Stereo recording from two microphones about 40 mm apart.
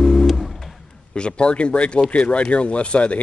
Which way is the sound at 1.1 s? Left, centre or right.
Left.